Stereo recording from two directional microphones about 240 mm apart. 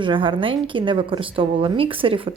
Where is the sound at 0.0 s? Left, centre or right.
Right.